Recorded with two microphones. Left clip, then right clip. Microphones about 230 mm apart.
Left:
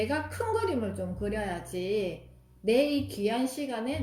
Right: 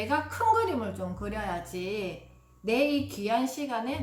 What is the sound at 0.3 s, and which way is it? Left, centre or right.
A woman's voice, centre.